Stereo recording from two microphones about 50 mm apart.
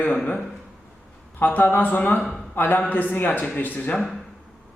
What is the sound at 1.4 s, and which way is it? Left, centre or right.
A man's voice, left.